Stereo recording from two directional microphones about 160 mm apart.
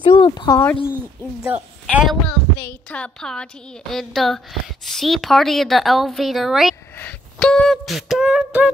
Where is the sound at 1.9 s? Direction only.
5° right (ahead or behind).